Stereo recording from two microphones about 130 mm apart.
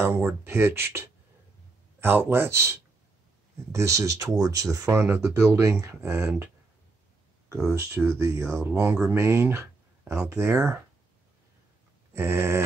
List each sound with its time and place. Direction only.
0.0 s speech: 20° right (ahead or behind)
6.1 s speech: 10° right (ahead or behind)
7.7 s speech: 20° right (ahead or behind)
12.1 s speech: 20° right (ahead or behind)